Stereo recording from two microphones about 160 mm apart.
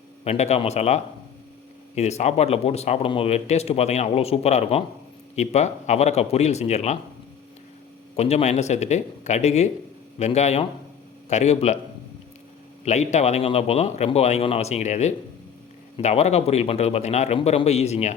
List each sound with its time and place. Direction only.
0.3 s a man's voice: 40° left (ahead or behind)
8.1 s a man's voice: 40° left (ahead or behind)
12.8 s a man's voice: 45° left (ahead or behind)